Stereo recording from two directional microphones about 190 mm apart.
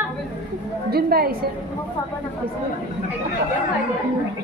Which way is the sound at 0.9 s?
55° right (ahead or behind).